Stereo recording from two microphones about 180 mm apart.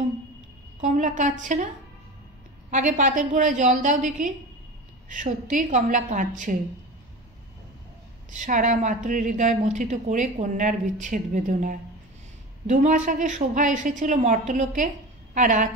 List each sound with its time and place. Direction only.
0.7 s a woman's voice: 45° right (ahead or behind)
2.7 s a woman's voice: 45° right (ahead or behind)
8.3 s a woman's voice: 45° right (ahead or behind)